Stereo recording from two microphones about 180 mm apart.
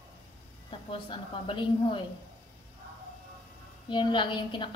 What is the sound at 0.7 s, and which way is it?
A woman's voice, 25° left (ahead or behind).